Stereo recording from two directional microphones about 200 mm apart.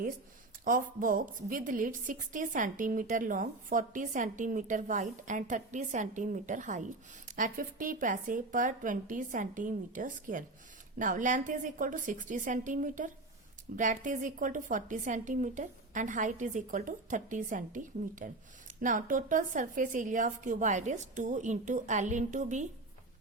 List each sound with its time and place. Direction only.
0.6 s a woman's voice: 40° right (ahead or behind)